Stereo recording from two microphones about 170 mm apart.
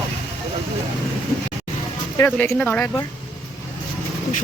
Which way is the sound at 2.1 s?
10° left (ahead or behind).